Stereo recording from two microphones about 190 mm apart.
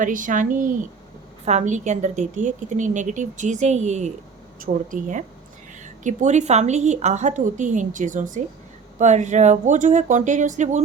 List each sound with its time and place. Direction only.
0.0 s a woman's voice: 45° right (ahead or behind)